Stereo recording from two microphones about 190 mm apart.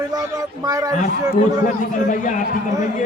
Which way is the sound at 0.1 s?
20° right (ahead or behind).